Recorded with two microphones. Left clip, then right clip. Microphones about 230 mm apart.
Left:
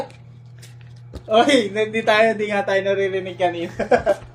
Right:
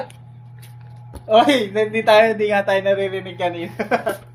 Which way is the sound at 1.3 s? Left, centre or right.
Right.